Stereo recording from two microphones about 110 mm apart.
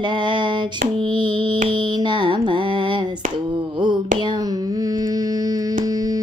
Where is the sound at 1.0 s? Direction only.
45° right (ahead or behind).